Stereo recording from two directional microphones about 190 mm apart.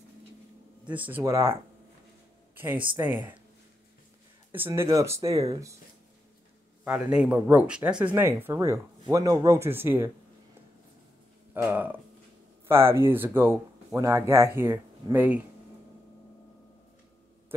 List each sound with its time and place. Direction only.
0.8 s speech: 10° right (ahead or behind)
4.5 s speech: 10° right (ahead or behind)
6.8 s speech: 5° right (ahead or behind)
11.5 s speech: 10° right (ahead or behind)